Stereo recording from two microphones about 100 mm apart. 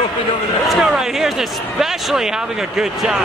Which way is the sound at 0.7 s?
5° right (ahead or behind).